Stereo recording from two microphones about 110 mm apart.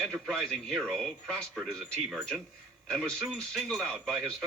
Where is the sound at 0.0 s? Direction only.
5° left (ahead or behind).